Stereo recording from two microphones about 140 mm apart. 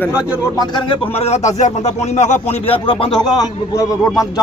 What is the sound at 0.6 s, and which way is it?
Speech, 35° left (ahead or behind).